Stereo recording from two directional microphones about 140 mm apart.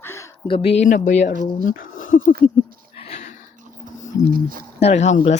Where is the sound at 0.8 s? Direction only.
65° left (ahead or behind).